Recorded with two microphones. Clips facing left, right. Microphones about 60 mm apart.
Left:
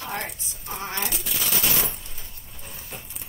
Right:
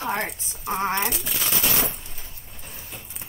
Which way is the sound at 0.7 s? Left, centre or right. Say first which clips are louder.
Right 7 dB; right.